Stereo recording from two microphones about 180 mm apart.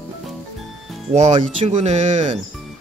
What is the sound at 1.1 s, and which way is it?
Speech, 40° right (ahead or behind).